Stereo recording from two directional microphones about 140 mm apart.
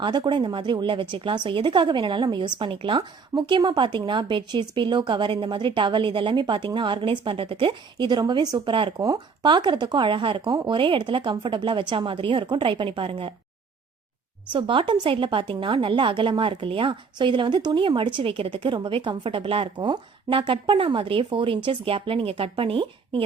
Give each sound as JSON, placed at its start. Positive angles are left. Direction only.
{"t": 0.0, "sound": "a woman's voice", "side_deg": -35}
{"t": 14.5, "sound": "a woman's voice", "side_deg": -35}